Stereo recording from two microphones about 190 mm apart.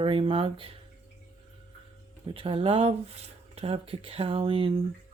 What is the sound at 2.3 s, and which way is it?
Speech, 25° right (ahead or behind).